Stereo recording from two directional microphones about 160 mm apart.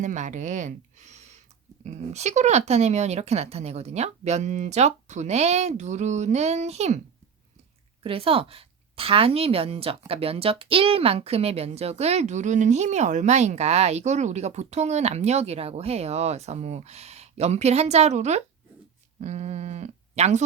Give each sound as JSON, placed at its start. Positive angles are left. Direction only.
{"t": 0.0, "sound": "a woman's voice", "side_deg": -50}
{"t": 8.0, "sound": "a woman's voice", "side_deg": -35}